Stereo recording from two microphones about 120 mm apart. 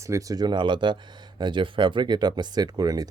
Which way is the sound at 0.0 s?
25° right (ahead or behind).